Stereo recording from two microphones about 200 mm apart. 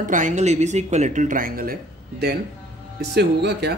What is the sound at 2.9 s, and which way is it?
Speech, 55° right (ahead or behind).